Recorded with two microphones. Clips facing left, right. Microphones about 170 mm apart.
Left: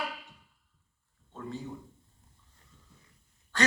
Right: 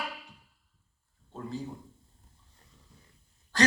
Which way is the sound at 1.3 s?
35° right (ahead or behind).